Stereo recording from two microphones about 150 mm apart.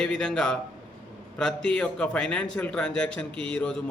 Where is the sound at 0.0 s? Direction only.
5° left (ahead or behind).